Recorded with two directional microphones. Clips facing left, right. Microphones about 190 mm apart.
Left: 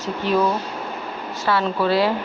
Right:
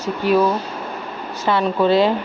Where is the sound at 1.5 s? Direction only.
20° right (ahead or behind).